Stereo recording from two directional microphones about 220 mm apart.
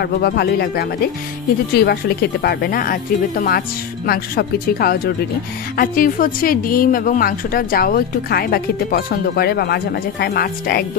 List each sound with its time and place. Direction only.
0.0 s a woman's voice: 45° left (ahead or behind)
1.9 s a woman's voice: 45° left (ahead or behind)